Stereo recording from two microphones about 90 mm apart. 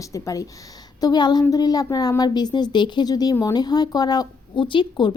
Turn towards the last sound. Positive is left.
turn(degrees=60)  # may be behind; listen again after turning